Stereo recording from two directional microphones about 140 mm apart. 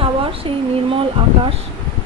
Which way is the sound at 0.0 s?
40° right (ahead or behind).